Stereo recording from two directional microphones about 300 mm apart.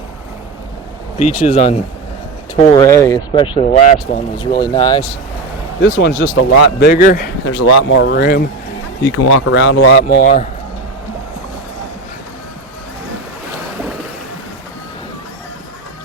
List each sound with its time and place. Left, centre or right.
1.2 s speech: left
5.8 s speech: left
7.4 s speech: left
9.0 s speech: left